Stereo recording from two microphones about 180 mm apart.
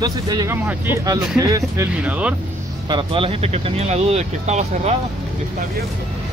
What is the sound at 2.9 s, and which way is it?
Speech, 30° right (ahead or behind).